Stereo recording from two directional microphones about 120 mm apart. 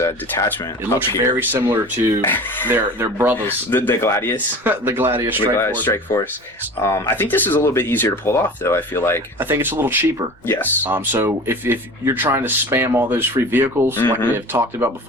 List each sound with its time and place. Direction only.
0.0 s speech: 25° left (ahead or behind)
0.9 s speech: 20° right (ahead or behind)
2.2 s speech: 15° left (ahead or behind)
2.6 s speech: 15° right (ahead or behind)
3.3 s speech: 15° left (ahead or behind)
4.6 s speech: 15° right (ahead or behind)
5.5 s speech: 15° left (ahead or behind)
9.4 s speech: 15° right (ahead or behind)
10.4 s speech: 20° left (ahead or behind)
10.8 s speech: 15° right (ahead or behind)
13.9 s speech: 15° left (ahead or behind)
14.3 s speech: 20° right (ahead or behind)